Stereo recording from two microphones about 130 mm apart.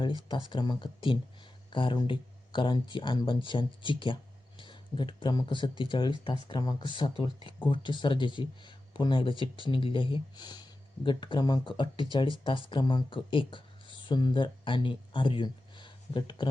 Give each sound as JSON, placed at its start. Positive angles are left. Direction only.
{"t": 0.3, "sound": "speech", "side_deg": 35}